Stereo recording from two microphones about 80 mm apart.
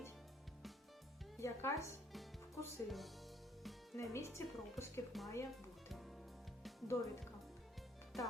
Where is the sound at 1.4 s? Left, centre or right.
Left.